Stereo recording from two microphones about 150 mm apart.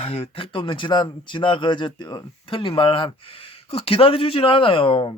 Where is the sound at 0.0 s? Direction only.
40° left (ahead or behind).